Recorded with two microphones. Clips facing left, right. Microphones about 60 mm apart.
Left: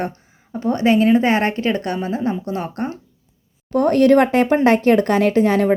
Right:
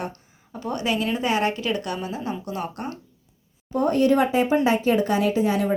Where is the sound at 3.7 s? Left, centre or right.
Left.